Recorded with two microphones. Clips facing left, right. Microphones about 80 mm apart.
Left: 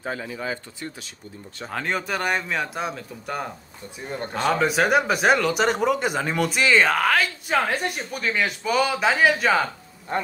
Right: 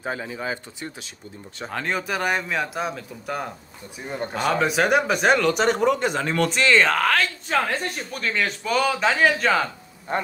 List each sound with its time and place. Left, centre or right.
0.0 s speech: right
1.7 s speech: centre